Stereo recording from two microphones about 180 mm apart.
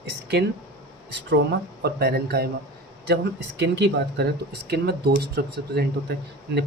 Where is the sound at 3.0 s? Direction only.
75° right (ahead or behind).